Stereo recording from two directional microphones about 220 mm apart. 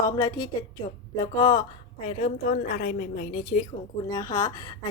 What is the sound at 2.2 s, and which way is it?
Speech, 40° left (ahead or behind).